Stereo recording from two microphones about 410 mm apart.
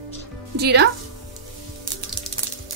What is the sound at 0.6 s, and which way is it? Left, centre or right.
Speech, right.